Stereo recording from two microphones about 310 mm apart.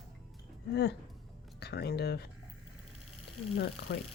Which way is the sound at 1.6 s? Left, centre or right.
Left.